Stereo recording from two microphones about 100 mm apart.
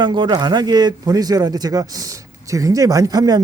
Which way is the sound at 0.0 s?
50° right (ahead or behind).